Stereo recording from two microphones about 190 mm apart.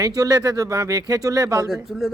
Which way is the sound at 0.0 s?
20° right (ahead or behind).